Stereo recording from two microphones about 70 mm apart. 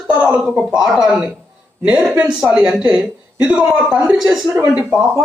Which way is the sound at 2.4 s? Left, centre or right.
Centre.